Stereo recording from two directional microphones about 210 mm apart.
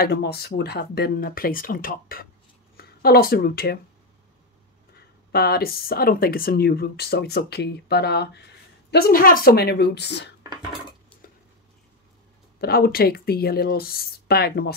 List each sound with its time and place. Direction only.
0.0 s speech: 50° left (ahead or behind)
5.3 s speech: 45° left (ahead or behind)
12.5 s speech: 45° left (ahead or behind)